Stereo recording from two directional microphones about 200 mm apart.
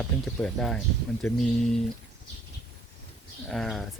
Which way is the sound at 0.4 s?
5° left (ahead or behind).